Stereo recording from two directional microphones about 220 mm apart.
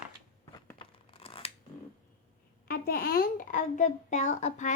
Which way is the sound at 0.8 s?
25° left (ahead or behind).